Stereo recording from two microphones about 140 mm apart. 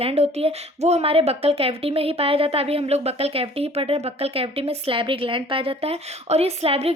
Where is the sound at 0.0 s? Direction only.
45° right (ahead or behind).